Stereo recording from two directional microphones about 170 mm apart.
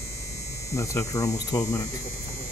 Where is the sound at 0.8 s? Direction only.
15° left (ahead or behind).